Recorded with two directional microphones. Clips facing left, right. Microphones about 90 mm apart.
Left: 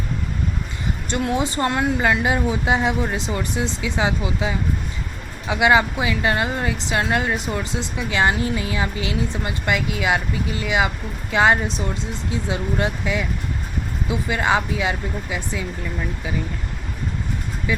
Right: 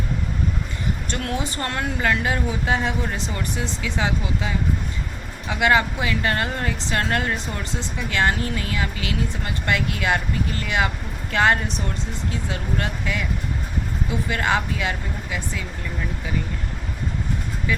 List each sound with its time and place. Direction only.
1.1 s a woman's voice: 20° left (ahead or behind)
17.7 s a woman's voice: 15° left (ahead or behind)